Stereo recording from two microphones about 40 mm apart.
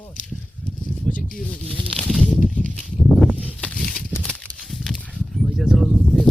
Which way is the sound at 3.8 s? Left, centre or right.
Centre.